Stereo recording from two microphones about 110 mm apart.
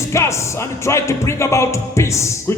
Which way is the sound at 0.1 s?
25° left (ahead or behind).